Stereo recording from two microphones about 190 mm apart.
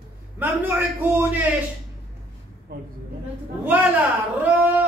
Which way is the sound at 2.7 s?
50° right (ahead or behind).